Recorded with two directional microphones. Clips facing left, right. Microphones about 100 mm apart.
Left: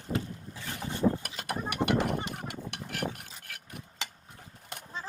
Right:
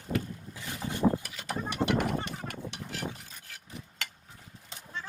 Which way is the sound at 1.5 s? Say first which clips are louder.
Even; 55° left (ahead or behind).